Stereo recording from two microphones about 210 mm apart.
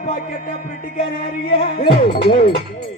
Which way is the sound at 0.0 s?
45° left (ahead or behind).